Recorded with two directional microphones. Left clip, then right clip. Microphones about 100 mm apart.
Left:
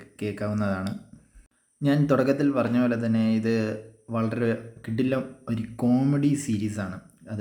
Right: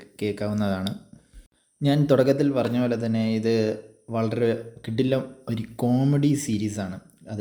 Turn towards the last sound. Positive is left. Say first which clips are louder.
# right 1 dB
turn(degrees=-15)  # may be behind; listen again after turning